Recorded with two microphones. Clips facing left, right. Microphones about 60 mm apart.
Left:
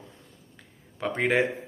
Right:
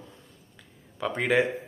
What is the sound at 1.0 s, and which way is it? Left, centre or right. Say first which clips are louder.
Speech: even; left.